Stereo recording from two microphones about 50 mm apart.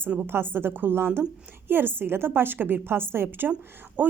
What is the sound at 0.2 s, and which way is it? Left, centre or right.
A woman's voice, right.